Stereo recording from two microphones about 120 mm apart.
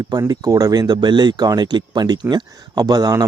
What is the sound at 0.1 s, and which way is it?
Speech, 30° right (ahead or behind).